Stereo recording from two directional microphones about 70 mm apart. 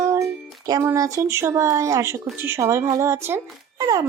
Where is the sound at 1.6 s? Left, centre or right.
Right.